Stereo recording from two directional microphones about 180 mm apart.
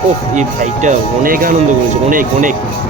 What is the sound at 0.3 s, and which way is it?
Speech, 40° right (ahead or behind).